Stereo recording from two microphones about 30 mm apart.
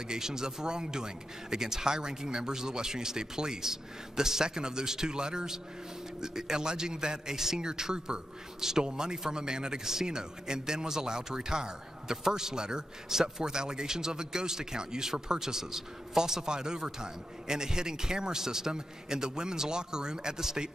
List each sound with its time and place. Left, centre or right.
0.0 s a man's voice: right